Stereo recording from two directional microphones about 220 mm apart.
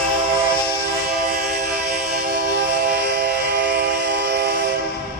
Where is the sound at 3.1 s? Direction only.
45° right (ahead or behind).